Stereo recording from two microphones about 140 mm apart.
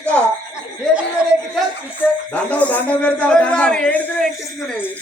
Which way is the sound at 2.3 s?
10° left (ahead or behind).